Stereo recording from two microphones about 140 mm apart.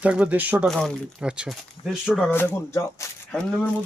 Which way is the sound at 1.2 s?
5° right (ahead or behind).